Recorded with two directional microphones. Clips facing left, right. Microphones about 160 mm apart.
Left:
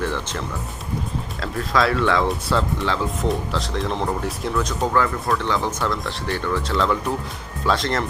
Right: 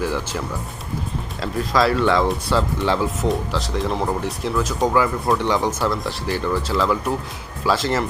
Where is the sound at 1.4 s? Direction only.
Centre (ahead or behind).